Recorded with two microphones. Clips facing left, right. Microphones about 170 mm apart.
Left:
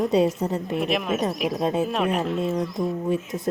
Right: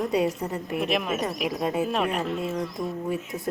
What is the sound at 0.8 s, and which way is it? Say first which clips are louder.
Speech: left 1 dB; centre (ahead or behind).